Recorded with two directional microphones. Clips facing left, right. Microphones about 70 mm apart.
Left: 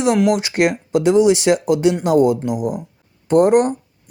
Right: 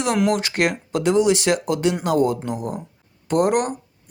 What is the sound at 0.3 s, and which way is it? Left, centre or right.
Speech, centre.